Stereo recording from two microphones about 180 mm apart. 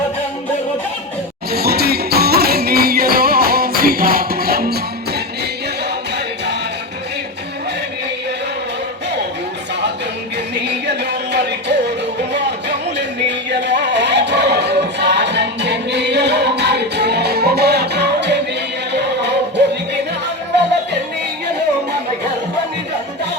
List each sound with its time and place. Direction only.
1.5 s music: 60° right (ahead or behind)
10.5 s music: 70° right (ahead or behind)